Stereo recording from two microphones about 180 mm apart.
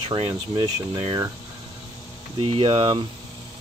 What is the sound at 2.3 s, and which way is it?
Speech, 30° right (ahead or behind).